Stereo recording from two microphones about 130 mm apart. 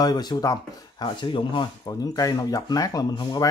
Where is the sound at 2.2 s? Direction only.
30° left (ahead or behind).